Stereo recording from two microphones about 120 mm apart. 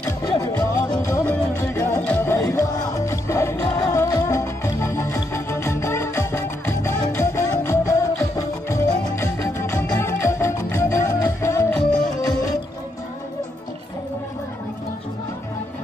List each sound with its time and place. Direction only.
0.2 s music: 30° left (ahead or behind)
1.2 s music: 20° left (ahead or behind)
11.7 s music: 5° left (ahead or behind)
12.2 s music: 30° left (ahead or behind)